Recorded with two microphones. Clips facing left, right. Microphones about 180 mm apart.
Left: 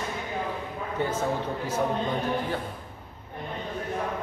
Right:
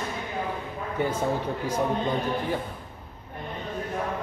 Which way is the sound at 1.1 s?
10° right (ahead or behind).